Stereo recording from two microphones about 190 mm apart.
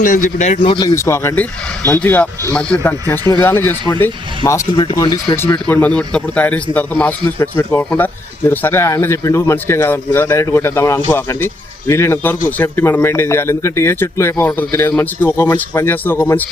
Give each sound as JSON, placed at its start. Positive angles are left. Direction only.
{"t": 0.0, "sound": "a man's voice", "side_deg": 45}
{"t": 0.6, "sound": "a man's voice", "side_deg": 25}
{"t": 5.6, "sound": "a man's voice", "side_deg": 5}